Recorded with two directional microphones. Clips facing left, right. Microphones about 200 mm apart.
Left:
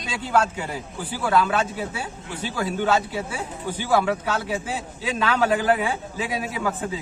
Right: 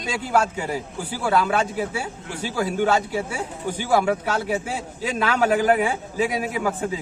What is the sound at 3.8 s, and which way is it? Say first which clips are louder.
A man's voice: right 1 dB; 15° right (ahead or behind).